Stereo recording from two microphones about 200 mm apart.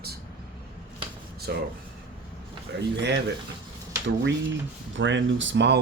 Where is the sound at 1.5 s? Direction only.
55° right (ahead or behind).